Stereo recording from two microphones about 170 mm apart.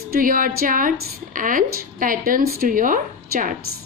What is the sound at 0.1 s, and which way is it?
A woman's voice, 55° right (ahead or behind).